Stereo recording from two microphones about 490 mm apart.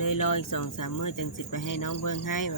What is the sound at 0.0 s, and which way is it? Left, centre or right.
Speech, left.